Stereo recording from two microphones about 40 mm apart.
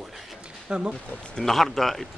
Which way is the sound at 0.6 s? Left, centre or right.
Right.